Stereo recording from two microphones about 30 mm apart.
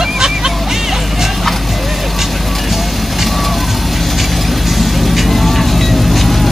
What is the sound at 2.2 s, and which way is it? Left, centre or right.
Vehicle, centre.